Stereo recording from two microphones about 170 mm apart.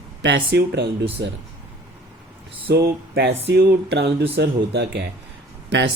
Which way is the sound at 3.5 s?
80° right.